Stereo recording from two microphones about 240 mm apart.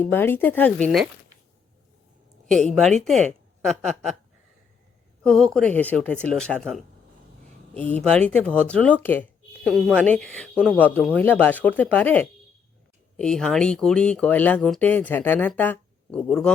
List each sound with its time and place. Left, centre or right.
0.0 s speech: centre
2.5 s speech: centre
5.2 s speech: centre